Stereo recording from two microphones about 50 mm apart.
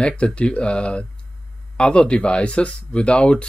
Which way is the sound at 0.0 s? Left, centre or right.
Left.